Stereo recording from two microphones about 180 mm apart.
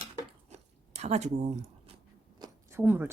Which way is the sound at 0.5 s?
40° right (ahead or behind).